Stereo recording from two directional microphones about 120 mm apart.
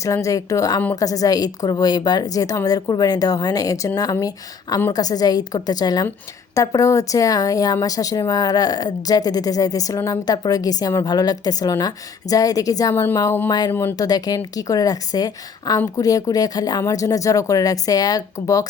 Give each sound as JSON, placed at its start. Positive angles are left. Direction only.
{"t": 0.0, "sound": "speech", "side_deg": 25}
{"t": 12.9, "sound": "speech", "side_deg": 20}